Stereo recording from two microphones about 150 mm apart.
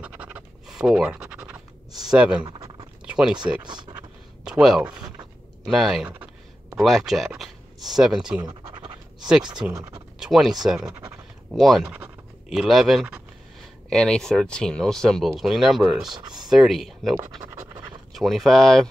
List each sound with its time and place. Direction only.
0.0 s scratch: 10° right (ahead or behind)
2.0 s speech: 5° right (ahead or behind)
3.1 s a sound: 5° right (ahead or behind)
3.6 s speech: 30° right (ahead or behind)
4.5 s speech: 5° right (ahead or behind)
8.4 s scratch: 30° right (ahead or behind)
9.8 s a sound: 25° right (ahead or behind)
10.1 s a sound: 5° right (ahead or behind)
10.6 s speech: centre (ahead or behind)